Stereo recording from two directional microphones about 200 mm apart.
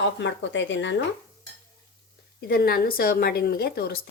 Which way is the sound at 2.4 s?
50° left (ahead or behind).